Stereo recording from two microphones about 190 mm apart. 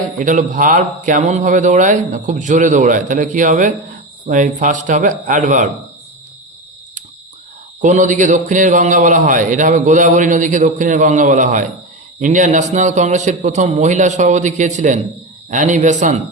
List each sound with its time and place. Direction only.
0.2 s a man's voice: 45° right (ahead or behind)
7.8 s a man's voice: 40° right (ahead or behind)